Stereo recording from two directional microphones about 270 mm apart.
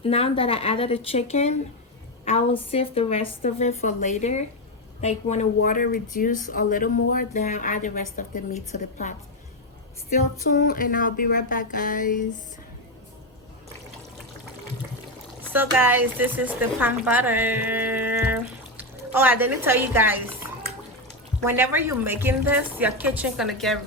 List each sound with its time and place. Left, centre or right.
0.0 s speech: left
15.5 s a woman's voice: centre
21.4 s a woman's voice: centre